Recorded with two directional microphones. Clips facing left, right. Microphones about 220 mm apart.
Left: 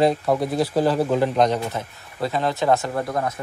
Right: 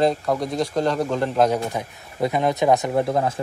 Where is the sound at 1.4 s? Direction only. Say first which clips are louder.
Right 1 dB; 15° right (ahead or behind).